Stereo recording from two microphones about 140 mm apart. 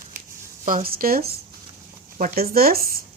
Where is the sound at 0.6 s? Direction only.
85° right.